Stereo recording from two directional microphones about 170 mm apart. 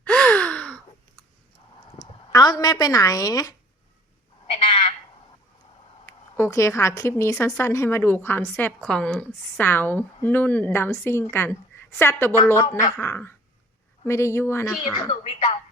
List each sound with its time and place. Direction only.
0.0 s gasp: 5° left (ahead or behind)
2.3 s a woman's voice: 25° left (ahead or behind)
4.5 s frog: 35° left (ahead or behind)
6.1 s a woman's voice: 15° left (ahead or behind)
14.9 s a woman's voice: 25° left (ahead or behind)
15.2 s music: 40° left (ahead or behind)